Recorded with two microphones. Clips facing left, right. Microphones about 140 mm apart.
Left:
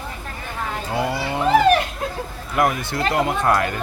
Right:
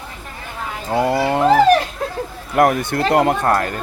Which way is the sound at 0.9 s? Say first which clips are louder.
Right 7 dB; 50° right (ahead or behind).